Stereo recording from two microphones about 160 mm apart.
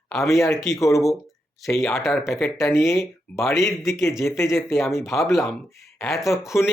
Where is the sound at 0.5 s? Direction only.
Centre (ahead or behind).